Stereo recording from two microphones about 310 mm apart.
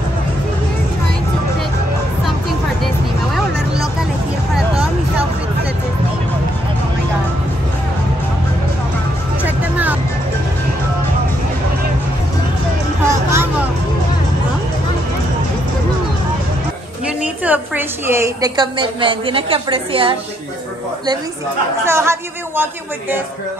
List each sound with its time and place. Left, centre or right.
9.4 s music: centre
13.1 s vehicle: centre
17.2 s a sound: centre
21.8 s a woman's voice: centre